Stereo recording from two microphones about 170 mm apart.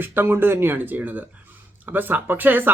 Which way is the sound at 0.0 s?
10° right (ahead or behind).